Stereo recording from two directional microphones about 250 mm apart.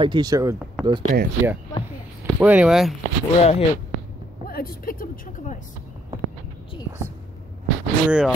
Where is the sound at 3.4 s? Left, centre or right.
Left.